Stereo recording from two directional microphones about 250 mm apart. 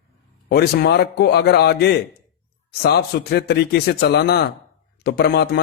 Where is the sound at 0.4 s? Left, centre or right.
Left.